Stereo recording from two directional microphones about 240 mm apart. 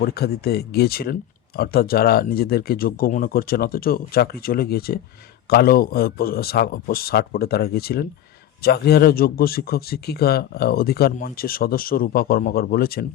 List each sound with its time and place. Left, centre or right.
0.0 s speech: left